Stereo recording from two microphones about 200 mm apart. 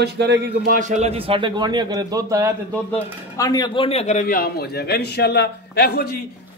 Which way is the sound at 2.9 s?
20° left (ahead or behind).